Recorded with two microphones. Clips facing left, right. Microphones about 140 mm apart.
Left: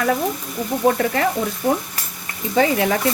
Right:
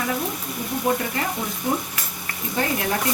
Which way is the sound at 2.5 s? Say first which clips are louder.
Left 7 dB; 90° left.